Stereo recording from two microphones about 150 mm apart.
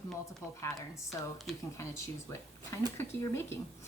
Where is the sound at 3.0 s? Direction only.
15° left (ahead or behind).